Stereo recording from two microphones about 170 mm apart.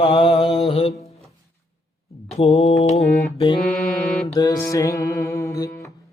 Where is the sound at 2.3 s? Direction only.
35° left (ahead or behind).